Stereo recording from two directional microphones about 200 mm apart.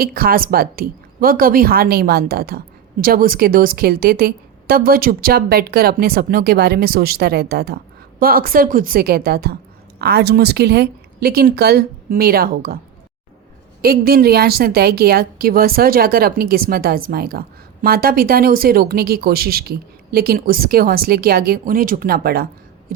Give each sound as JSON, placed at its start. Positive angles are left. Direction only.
{"t": 0.0, "sound": "a woman's voice", "side_deg": -45}
{"t": 13.8, "sound": "a woman's voice", "side_deg": -50}